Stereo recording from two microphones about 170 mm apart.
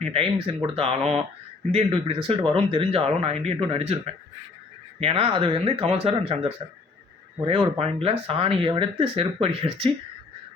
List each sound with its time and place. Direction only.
0.0 s speech: 35° right (ahead or behind)